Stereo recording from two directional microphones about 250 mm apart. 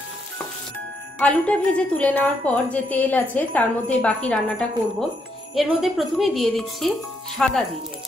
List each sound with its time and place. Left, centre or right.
1.2 s a woman's voice: centre